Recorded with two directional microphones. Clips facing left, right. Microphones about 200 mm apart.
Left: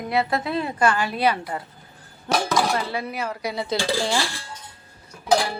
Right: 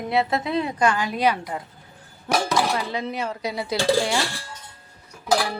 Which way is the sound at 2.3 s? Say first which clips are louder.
Even; 5° right (ahead or behind).